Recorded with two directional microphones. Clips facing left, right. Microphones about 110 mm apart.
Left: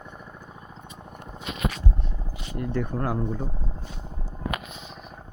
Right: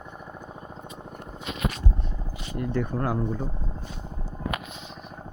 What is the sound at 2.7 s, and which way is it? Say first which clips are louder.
Speech: even; 15° right (ahead or behind).